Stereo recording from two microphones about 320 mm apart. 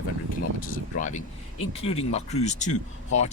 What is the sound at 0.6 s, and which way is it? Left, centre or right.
Speech, left.